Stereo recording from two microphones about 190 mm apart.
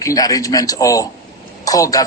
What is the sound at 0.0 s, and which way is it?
A man's voice, 20° left (ahead or behind).